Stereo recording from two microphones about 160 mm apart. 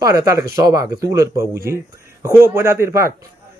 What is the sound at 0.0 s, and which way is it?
A man's voice, 20° right (ahead or behind).